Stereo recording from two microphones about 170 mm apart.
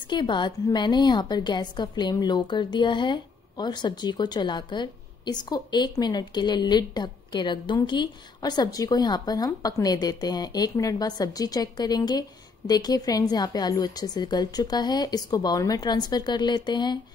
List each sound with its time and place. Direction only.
0.1 s a woman's voice: 25° left (ahead or behind)